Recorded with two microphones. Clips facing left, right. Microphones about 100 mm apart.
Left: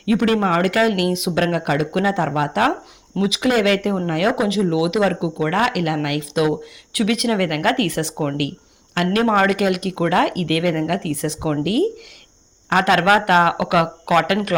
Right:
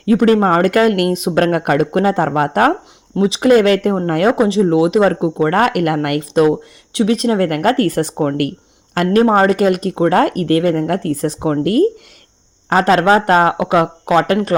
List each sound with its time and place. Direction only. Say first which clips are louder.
0.0 s speech: right 6 dB; 40° right (ahead or behind)
3.2 s speech: right 7 dB; 35° right (ahead or behind)